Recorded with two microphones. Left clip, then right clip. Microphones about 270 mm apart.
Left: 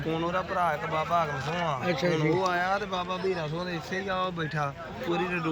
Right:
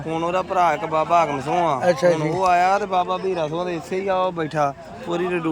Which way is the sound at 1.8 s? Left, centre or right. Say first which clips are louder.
Right 10 dB; centre.